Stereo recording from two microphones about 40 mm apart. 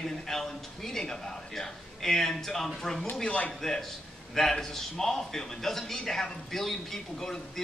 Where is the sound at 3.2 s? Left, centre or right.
Left.